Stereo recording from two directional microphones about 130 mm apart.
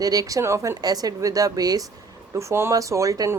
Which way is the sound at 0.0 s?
30° right (ahead or behind).